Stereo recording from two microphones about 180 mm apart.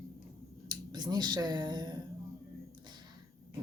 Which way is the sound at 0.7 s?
25° right (ahead or behind).